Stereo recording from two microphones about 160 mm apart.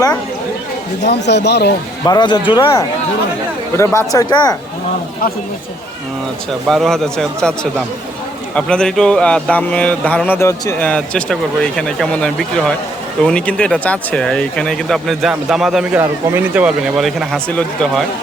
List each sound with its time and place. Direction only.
1.0 s speech: 90° left
2.0 s speech: 25° left (ahead or behind)
3.8 s speech: 20° left (ahead or behind)
6.7 s speech: centre (ahead or behind)